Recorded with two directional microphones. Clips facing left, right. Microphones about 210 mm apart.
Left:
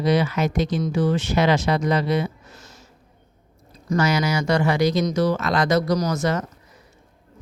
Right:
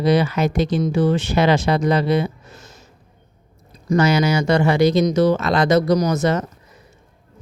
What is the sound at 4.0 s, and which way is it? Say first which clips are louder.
Speech: right 4 dB; 25° right (ahead or behind).